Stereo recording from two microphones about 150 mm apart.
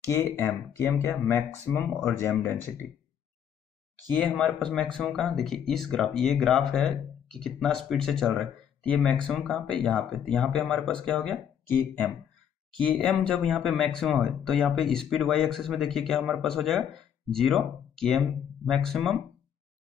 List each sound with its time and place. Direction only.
0.1 s speech: 15° left (ahead or behind)
4.1 s speech: 10° left (ahead or behind)
12.8 s speech: 5° left (ahead or behind)